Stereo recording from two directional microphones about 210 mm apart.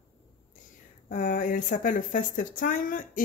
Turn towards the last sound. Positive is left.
turn(degrees=40)  # may be behind; listen again after turning